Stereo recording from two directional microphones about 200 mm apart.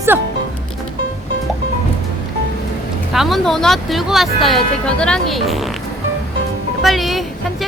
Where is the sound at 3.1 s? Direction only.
Centre (ahead or behind).